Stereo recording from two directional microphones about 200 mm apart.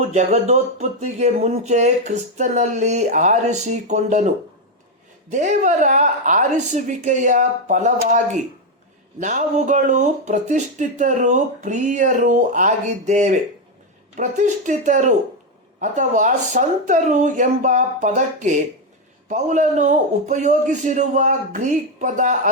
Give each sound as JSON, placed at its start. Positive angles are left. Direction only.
{"t": 0.1, "sound": "speech", "side_deg": -35}
{"t": 5.3, "sound": "speech", "side_deg": -35}